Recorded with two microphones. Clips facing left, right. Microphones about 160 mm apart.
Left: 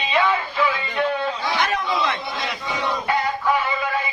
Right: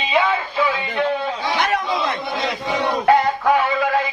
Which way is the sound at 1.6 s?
50° right (ahead or behind).